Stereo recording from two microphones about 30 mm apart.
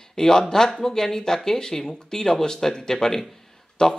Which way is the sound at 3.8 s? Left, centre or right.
Left.